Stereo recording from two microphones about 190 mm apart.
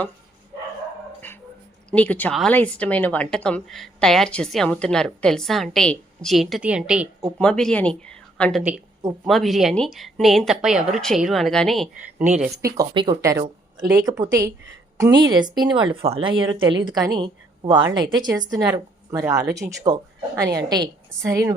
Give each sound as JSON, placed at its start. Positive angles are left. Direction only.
{"t": 1.9, "sound": "a woman's voice", "side_deg": 10}
{"t": 12.7, "sound": "a woman's voice", "side_deg": -20}
{"t": 18.5, "sound": "a woman's voice", "side_deg": -5}
{"t": 19.1, "sound": "a woman's voice", "side_deg": -15}